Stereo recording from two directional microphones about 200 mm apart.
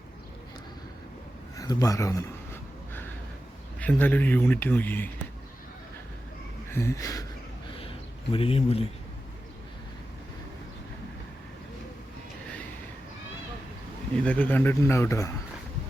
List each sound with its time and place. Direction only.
1.5 s speech: 15° left (ahead or behind)
3.8 s speech: 10° left (ahead or behind)
6.7 s speech: 15° left (ahead or behind)
8.3 s speech: 30° left (ahead or behind)
14.3 s speech: 10° left (ahead or behind)